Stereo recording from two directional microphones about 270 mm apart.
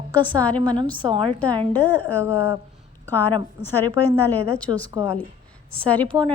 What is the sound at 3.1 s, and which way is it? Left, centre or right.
A woman's voice, centre.